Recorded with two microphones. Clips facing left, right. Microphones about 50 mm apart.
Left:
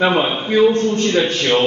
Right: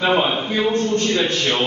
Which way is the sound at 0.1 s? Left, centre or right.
Centre.